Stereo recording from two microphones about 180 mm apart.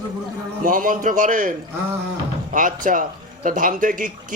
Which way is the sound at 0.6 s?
50° right (ahead or behind).